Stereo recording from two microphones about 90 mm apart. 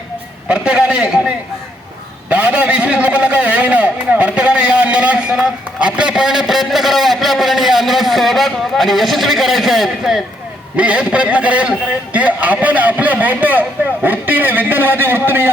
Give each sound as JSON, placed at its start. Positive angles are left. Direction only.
{"t": 0.4, "sound": "a sound", "side_deg": -10}
{"t": 2.3, "sound": "a man's voice", "side_deg": -15}
{"t": 10.8, "sound": "a man's voice", "side_deg": -15}